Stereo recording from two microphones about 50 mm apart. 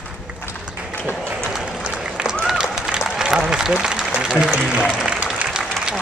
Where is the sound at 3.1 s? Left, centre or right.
Centre.